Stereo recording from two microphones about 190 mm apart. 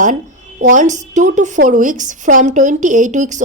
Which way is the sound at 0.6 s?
40° right (ahead or behind).